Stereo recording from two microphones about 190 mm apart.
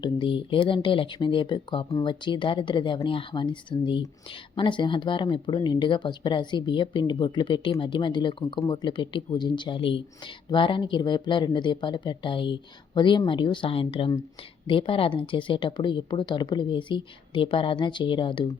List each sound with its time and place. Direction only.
0.0 s speech: 25° left (ahead or behind)